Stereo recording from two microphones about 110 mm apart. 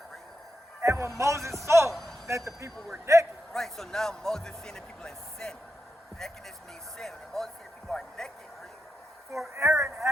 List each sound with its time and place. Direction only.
0.8 s music: 25° right (ahead or behind)
1.2 s speech: 25° right (ahead or behind)
1.9 s a sound: centre (ahead or behind)
2.2 s speech: 25° right (ahead or behind)
3.5 s a man's voice: 5° left (ahead or behind)
7.0 s a man's voice: 5° left (ahead or behind)
9.6 s speech: 25° right (ahead or behind)